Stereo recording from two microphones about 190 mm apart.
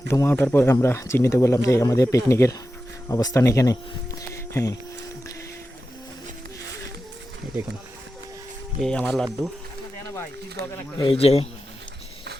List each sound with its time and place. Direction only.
0.1 s speech: 15° left (ahead or behind)
8.8 s speech: 5° left (ahead or behind)
10.7 s speech: 25° left (ahead or behind)